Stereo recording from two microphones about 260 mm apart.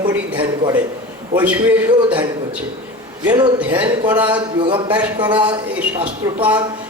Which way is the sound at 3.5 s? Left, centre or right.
Centre.